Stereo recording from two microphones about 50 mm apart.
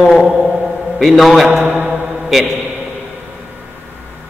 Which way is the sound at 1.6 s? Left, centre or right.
Right.